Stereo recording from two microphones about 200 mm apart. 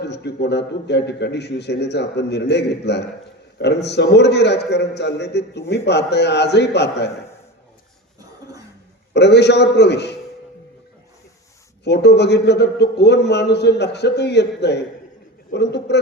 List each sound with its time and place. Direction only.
0.0 s a man's voice: 60° left (ahead or behind)
9.1 s a man's voice: 55° left (ahead or behind)
11.9 s a man's voice: 55° left (ahead or behind)